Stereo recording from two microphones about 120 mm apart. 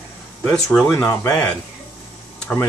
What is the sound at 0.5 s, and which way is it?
Speech, 5° left (ahead or behind).